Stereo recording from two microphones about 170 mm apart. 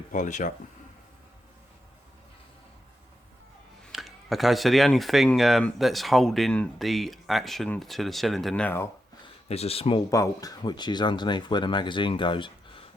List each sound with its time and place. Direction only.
0.1 s speech: 45° left (ahead or behind)
3.9 s speech: centre (ahead or behind)
9.2 s speech: 35° left (ahead or behind)
10.1 s speech: 20° left (ahead or behind)